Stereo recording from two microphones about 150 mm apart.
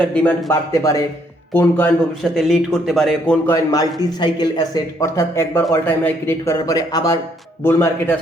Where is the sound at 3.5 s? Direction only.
25° left (ahead or behind).